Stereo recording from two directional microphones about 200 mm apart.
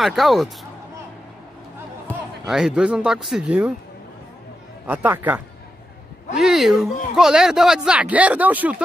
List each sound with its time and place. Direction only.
0.0 s speech: centre (ahead or behind)
2.0 s speech: centre (ahead or behind)
4.8 s speech: 10° right (ahead or behind)